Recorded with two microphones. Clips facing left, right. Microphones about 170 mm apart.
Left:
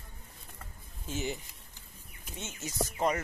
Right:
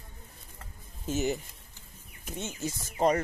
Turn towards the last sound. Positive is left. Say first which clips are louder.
# right 4 dB
turn(degrees=-35)  # may be behind; listen again after turning